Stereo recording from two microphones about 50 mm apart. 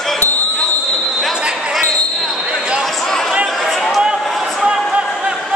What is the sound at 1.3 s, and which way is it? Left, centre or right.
Basketball bounce, centre.